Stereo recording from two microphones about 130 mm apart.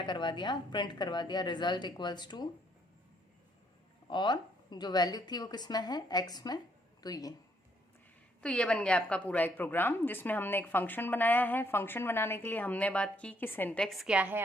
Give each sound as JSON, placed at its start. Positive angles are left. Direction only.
{"t": 0.0, "sound": "a woman's voice", "side_deg": 35}
{"t": 4.1, "sound": "a woman's voice", "side_deg": 35}
{"t": 8.4, "sound": "a woman's voice", "side_deg": 5}
{"t": 14.2, "sound": "a woman's voice", "side_deg": -15}